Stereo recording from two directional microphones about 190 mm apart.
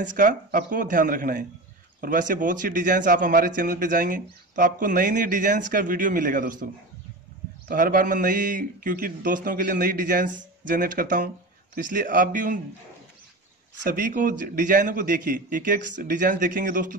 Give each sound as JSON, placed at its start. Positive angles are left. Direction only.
{"t": 0.0, "sound": "speech", "side_deg": -45}
{"t": 13.8, "sound": "speech", "side_deg": -45}